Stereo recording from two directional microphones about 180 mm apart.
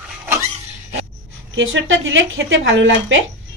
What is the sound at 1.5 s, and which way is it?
Speech, 90° right.